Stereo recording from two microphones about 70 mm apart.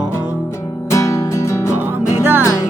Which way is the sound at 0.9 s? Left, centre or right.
Left.